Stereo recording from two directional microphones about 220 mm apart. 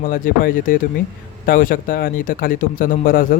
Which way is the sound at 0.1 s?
40° left (ahead or behind).